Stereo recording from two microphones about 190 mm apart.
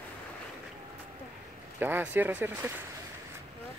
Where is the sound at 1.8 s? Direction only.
10° right (ahead or behind).